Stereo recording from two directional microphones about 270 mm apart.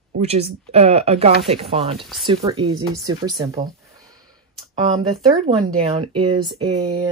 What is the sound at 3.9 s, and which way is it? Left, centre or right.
Sniff, centre.